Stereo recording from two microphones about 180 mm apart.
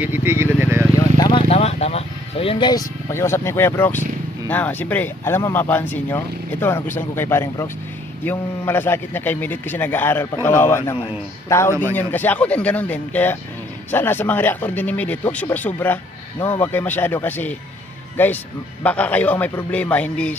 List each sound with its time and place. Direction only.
0.0 s speech: 10° right (ahead or behind)
0.9 s vehicle: 20° left (ahead or behind)
1.5 s vehicle: 35° left (ahead or behind); by 4.0 s 10° left (ahead or behind)
4.5 s speech: 10° left (ahead or behind)